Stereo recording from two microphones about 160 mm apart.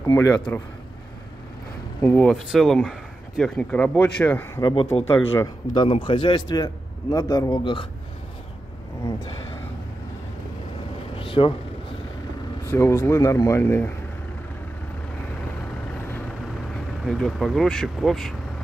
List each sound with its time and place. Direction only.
0.0 s a man's voice: 20° left (ahead or behind)
2.0 s speech: 10° left (ahead or behind)
4.6 s a man's voice: 30° left (ahead or behind)
5.0 s speech: 15° left (ahead or behind)
5.8 s a man's voice: 35° left (ahead or behind)
11.1 s a sound: 35° left (ahead or behind)
12.7 s speech: 15° left (ahead or behind)
17.0 s speech: centre (ahead or behind)